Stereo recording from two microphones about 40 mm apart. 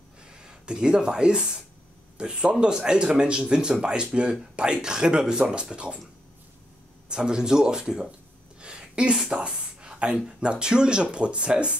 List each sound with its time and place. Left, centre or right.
0.3 s speech: centre
7.1 s speech: centre
8.5 s a sound: right
10.2 s speech: right